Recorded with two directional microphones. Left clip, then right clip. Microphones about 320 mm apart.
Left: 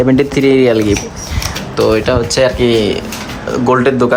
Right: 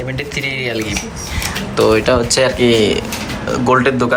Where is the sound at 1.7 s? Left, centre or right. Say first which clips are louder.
Even; centre.